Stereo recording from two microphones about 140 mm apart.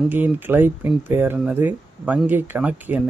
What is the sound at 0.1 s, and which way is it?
A man's voice, 15° right (ahead or behind).